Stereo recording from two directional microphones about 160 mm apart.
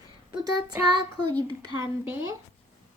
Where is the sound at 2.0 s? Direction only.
15° right (ahead or behind).